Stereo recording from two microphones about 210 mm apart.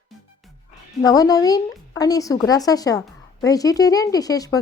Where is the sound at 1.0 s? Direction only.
15° left (ahead or behind).